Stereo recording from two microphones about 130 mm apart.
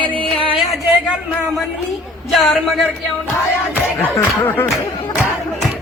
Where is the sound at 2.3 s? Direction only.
Centre (ahead or behind).